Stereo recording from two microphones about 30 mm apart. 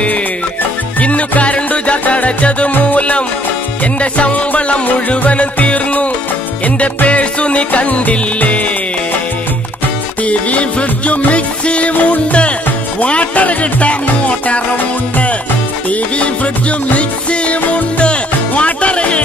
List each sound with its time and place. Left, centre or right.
1.4 s music: left
7.1 s music: left
10.2 s music: left
17.3 s music: left